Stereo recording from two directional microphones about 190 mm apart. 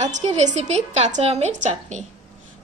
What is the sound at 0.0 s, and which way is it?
A woman's voice, 40° right (ahead or behind).